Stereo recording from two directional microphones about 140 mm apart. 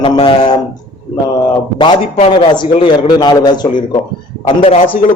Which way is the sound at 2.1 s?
40° left (ahead or behind).